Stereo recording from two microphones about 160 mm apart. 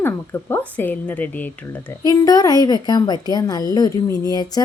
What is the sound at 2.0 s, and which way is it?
A woman's voice, 25° left (ahead or behind).